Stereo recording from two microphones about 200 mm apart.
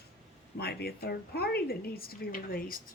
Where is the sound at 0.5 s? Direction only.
50° left (ahead or behind).